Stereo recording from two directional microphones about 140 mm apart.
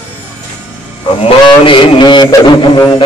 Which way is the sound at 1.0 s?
35° left (ahead or behind).